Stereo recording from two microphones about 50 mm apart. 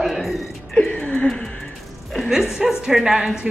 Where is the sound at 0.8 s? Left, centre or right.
Left.